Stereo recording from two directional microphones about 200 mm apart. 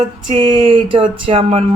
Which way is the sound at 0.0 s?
25° right (ahead or behind).